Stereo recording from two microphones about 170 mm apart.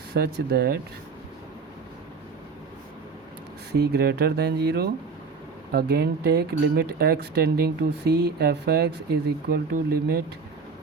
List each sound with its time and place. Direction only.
0.1 s speech: 70° right (ahead or behind)
3.7 s speech: 70° right (ahead or behind)